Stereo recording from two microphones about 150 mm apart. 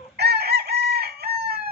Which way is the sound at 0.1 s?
90° right.